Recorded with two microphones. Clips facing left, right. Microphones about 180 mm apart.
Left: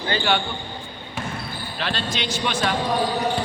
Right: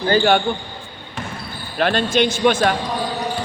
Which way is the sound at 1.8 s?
50° right (ahead or behind).